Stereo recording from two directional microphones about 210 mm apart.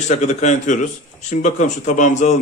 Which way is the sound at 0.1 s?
30° left (ahead or behind).